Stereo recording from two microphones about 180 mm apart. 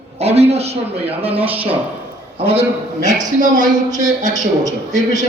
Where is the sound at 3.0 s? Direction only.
45° right (ahead or behind).